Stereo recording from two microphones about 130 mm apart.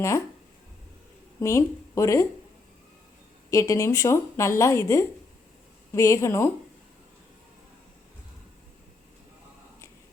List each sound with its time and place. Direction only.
1.4 s a woman's voice: 20° left (ahead or behind)
3.5 s a woman's voice: 25° left (ahead or behind)